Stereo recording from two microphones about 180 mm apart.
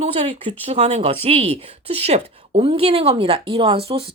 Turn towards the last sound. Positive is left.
turn(degrees=-30)  # may be behind; listen again after turning